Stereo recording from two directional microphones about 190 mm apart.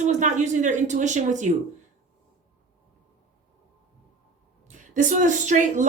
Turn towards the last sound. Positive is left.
turn(degrees=-40)  # may be behind; listen again after turning